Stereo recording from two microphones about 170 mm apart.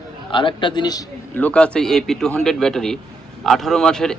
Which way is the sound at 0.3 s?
30° left (ahead or behind).